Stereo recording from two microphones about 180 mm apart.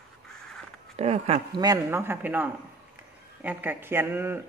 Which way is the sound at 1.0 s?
35° right (ahead or behind).